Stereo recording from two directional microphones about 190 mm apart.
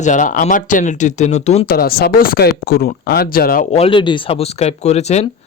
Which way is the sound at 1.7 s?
55° left (ahead or behind).